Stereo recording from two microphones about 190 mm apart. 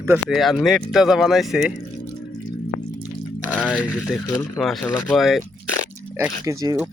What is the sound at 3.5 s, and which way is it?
Speech, 5° left (ahead or behind).